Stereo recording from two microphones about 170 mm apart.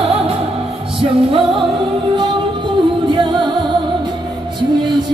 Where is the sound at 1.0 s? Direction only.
35° right (ahead or behind).